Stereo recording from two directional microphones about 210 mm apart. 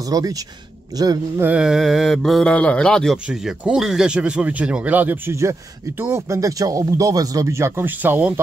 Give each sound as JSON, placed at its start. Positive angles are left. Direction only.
{"t": 0.0, "sound": "speech", "side_deg": -15}
{"t": 1.5, "sound": "speech", "side_deg": -5}